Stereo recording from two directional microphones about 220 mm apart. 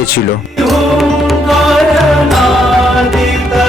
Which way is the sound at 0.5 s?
Centre (ahead or behind).